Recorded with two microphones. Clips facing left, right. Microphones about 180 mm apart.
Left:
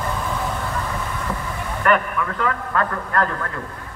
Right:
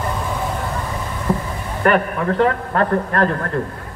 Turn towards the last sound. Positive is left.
turn(degrees=-35)  # may be behind; listen again after turning